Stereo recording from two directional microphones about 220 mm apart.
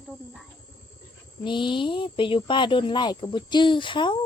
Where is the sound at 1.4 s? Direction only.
20° left (ahead or behind).